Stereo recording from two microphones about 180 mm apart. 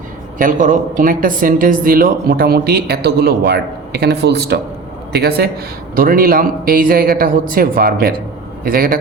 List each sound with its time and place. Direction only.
0.3 s speech: 45° right (ahead or behind)